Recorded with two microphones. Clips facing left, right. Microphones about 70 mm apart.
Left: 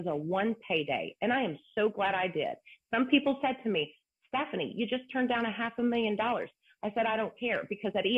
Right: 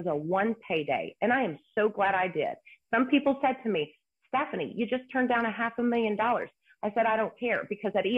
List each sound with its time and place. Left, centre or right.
0.3 s speech: right